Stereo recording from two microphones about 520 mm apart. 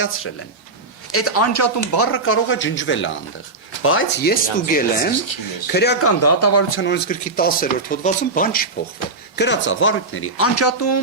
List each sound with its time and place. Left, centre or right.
1.1 s speech: left